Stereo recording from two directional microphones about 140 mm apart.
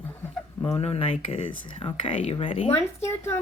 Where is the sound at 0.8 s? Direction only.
45° left (ahead or behind).